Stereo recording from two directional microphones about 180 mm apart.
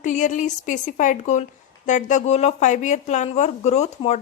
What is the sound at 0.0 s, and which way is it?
A woman's voice, 45° left (ahead or behind).